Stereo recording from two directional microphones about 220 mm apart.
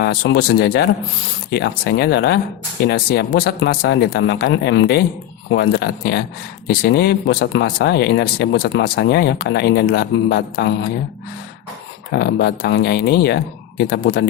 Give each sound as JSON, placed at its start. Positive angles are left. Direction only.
{"t": 0.0, "sound": "speech", "side_deg": 50}
{"t": 12.1, "sound": "speech", "side_deg": 50}